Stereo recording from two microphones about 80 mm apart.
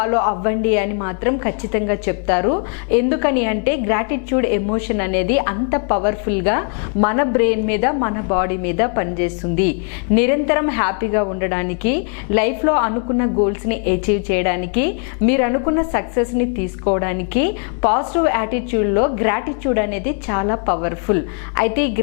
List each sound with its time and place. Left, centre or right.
0.0 s a woman's voice: left